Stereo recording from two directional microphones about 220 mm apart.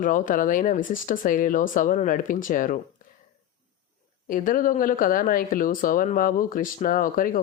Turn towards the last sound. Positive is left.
turn(degrees=40)  # may be behind; listen again after turning